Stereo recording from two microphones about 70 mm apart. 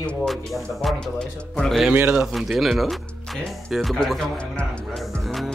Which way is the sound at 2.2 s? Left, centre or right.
Centre.